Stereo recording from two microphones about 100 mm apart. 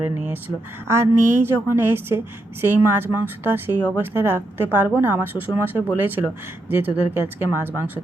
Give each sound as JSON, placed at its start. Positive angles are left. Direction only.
{"t": 0.0, "sound": "a woman's voice", "side_deg": -25}